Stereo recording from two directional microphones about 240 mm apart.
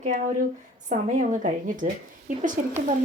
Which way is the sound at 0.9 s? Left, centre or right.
Right.